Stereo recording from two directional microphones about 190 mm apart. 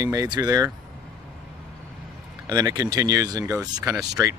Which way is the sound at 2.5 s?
20° right (ahead or behind).